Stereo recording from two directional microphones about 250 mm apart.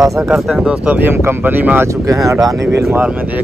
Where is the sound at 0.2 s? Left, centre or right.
Centre.